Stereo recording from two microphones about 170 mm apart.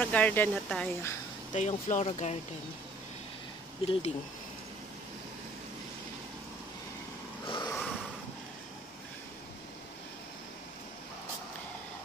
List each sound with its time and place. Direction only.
0.0 s speech: 10° left (ahead or behind)
1.5 s speech: 45° left (ahead or behind)
3.8 s speech: 30° left (ahead or behind)
7.4 s a sound: 30° left (ahead or behind)